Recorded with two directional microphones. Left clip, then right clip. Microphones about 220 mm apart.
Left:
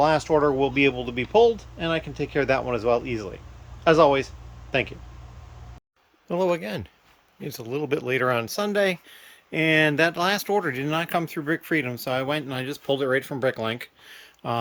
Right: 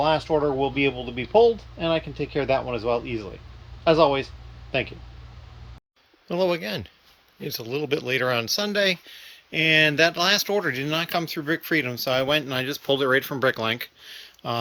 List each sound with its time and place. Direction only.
0.0 s speech: 20° left (ahead or behind)
6.2 s speech: 10° left (ahead or behind)